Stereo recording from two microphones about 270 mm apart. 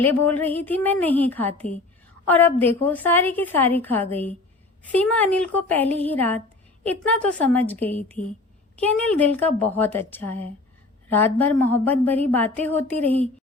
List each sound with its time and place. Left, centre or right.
0.0 s a woman's voice: centre
8.2 s speech: left
8.7 s a woman's voice: centre
10.2 s a woman's voice: left
11.1 s a woman's voice: centre